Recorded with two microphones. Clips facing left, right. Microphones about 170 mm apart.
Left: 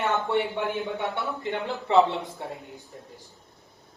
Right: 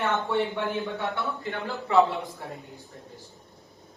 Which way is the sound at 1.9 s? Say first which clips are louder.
Left 1 dB; 25° left (ahead or behind).